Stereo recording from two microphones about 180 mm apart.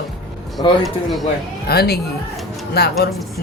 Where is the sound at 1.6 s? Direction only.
60° left (ahead or behind).